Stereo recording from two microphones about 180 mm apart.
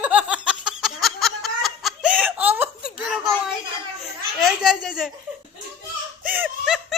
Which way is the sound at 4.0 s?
Centre (ahead or behind).